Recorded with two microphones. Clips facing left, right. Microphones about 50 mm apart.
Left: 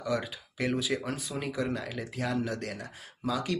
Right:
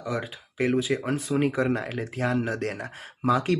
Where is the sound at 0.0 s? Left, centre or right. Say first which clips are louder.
Right 1 dB; right.